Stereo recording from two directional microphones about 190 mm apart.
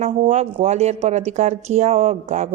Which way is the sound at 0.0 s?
35° right (ahead or behind).